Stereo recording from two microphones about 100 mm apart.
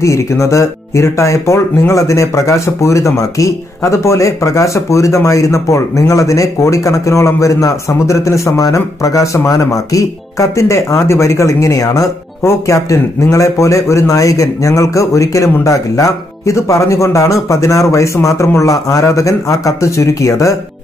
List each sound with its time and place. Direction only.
0.0 s speech: 30° left (ahead or behind)